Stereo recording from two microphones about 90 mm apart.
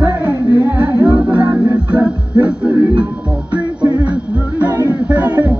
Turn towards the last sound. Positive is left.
turn(degrees=-15)  # may be behind; listen again after turning